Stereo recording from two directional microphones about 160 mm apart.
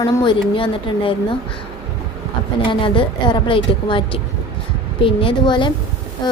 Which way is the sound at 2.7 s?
30° left (ahead or behind).